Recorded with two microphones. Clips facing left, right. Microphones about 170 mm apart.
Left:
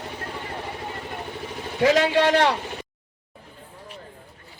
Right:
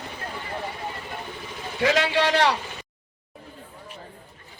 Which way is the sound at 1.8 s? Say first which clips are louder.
Left 4 dB; 45° left (ahead or behind).